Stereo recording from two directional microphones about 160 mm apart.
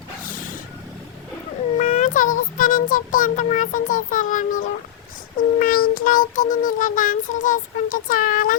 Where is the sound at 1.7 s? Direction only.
50° left (ahead or behind).